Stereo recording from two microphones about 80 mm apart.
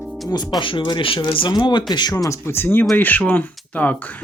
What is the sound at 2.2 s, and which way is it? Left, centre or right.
Speech, left.